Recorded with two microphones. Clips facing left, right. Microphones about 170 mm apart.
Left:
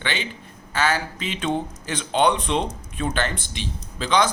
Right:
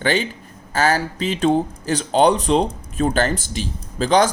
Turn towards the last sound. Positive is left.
turn(degrees=-45)  # may be behind; listen again after turning